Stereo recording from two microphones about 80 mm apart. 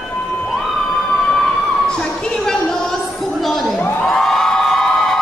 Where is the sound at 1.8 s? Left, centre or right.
Centre.